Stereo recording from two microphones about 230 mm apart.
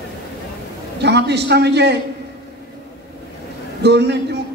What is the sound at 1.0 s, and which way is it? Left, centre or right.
Speech, right.